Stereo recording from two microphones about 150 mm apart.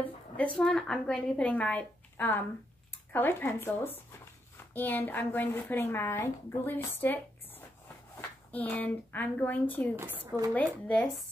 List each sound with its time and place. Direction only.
0.6 s a woman's voice: 5° left (ahead or behind)
9.9 s a woman's voice: 15° right (ahead or behind)
10.5 s a woman's voice: 10° left (ahead or behind)